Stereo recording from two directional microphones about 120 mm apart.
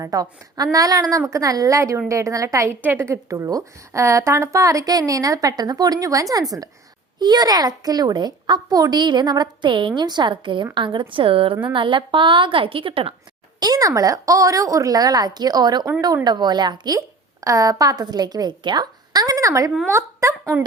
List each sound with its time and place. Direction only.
0.0 s a woman's voice: 30° right (ahead or behind); by 13.1 s 50° right (ahead or behind)
13.6 s a child's voice: 30° right (ahead or behind)